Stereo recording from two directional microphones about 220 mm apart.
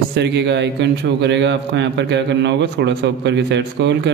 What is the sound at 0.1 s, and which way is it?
Speech, 50° right (ahead or behind).